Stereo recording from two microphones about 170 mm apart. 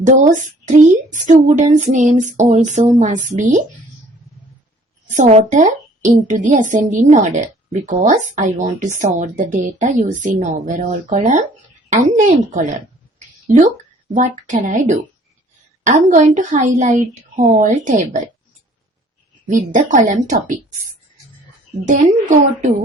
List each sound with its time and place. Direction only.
0.0 s speech: 45° right (ahead or behind)
5.1 s speech: 40° right (ahead or behind)
13.1 s a sound: 45° right (ahead or behind)
14.2 s speech: 45° right (ahead or behind)
19.5 s speech: 50° right (ahead or behind)
21.8 s speech: 50° right (ahead or behind)